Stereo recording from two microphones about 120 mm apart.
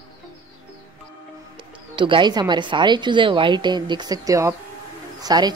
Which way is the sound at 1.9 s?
45° right (ahead or behind).